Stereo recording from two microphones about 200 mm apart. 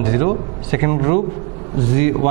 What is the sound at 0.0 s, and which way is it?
A man's voice, 15° right (ahead or behind).